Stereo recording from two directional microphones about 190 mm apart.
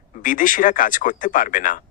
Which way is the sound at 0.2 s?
45° left (ahead or behind).